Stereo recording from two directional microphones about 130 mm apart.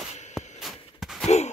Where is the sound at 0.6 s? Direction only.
Centre (ahead or behind).